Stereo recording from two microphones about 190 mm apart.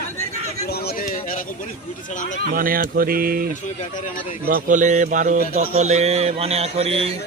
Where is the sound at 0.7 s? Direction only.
55° left (ahead or behind).